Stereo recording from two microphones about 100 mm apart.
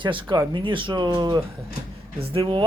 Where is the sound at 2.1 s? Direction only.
60° right (ahead or behind).